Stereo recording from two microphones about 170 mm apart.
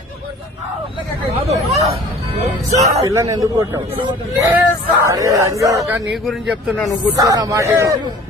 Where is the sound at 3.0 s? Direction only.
15° right (ahead or behind).